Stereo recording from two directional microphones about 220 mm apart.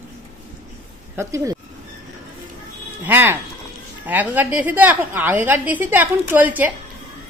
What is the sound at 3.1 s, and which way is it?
A woman's voice, 10° right (ahead or behind).